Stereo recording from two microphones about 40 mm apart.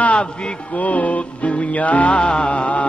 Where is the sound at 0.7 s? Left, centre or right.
Left.